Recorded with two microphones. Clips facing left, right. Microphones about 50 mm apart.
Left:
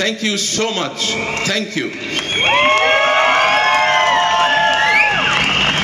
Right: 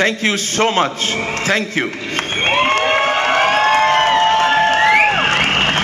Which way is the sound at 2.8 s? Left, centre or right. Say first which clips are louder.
Left 2 dB; left.